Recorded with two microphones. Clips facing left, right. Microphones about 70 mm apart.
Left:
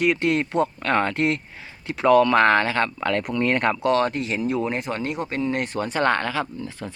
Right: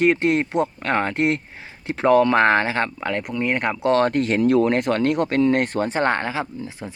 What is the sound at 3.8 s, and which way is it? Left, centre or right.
Speech, right.